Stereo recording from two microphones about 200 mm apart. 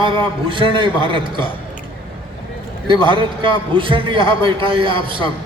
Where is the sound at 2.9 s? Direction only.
25° right (ahead or behind).